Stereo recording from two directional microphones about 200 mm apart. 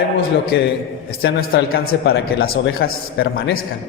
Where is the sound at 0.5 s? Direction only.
60° left (ahead or behind).